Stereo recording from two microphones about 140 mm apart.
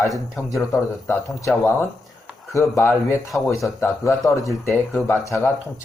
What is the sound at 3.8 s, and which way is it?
Speech, 20° left (ahead or behind).